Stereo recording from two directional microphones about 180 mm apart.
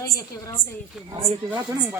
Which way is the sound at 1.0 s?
25° right (ahead or behind).